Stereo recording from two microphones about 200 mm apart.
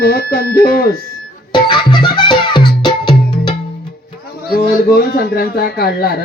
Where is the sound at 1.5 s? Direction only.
25° left (ahead or behind).